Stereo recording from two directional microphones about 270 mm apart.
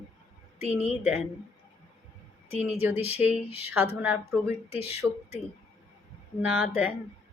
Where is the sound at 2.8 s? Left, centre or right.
Centre.